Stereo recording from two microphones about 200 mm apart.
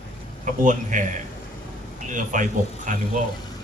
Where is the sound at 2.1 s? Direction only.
40° right (ahead or behind).